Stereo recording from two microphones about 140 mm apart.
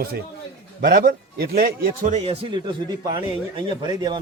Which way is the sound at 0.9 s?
90° right.